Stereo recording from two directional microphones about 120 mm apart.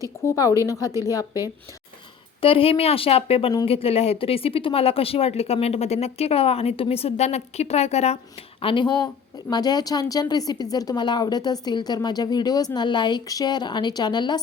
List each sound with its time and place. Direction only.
0.0 s a woman's voice: 25° left (ahead or behind)
2.4 s speech: 50° left (ahead or behind)
8.6 s a woman's voice: 40° left (ahead or behind)